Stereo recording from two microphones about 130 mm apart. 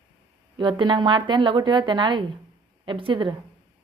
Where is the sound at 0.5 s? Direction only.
35° right (ahead or behind).